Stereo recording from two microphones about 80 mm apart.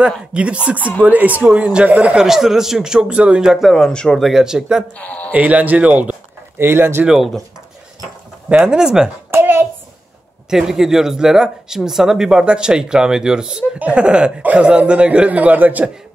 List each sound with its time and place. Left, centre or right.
0.3 s speech: centre
2.2 s a man's voice: centre
4.2 s speech: centre
4.9 s a man's voice: centre
5.3 s speech: centre
6.6 s speech: right
7.1 s a man's voice: centre
8.6 s speech: centre
9.3 s hands: right
10.5 s speech: centre; by 15.9 s right